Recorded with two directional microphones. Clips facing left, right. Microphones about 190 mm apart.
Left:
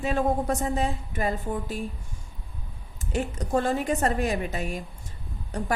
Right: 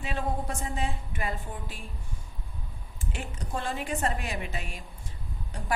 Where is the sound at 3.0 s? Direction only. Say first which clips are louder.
Left 9 dB; 40° left (ahead or behind).